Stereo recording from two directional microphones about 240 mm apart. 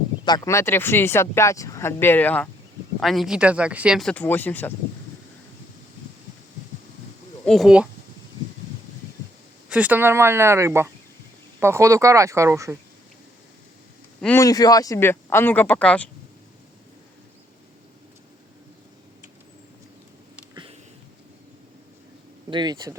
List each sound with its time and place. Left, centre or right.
0.3 s speech: centre
7.4 s speech: centre
9.6 s speech: centre
14.2 s speech: centre
20.3 s a sound: centre
22.4 s speech: centre